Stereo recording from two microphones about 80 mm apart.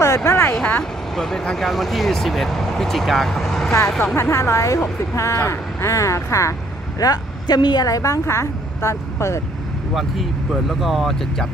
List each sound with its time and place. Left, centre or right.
0.0 s a sound: left
1.1 s speech: centre
4.0 s speech: left
7.0 s a woman's voice: left
10.8 s speech: centre